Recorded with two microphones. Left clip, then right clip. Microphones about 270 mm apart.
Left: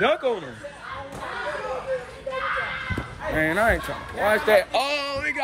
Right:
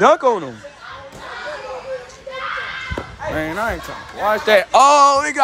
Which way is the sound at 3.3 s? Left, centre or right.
Centre.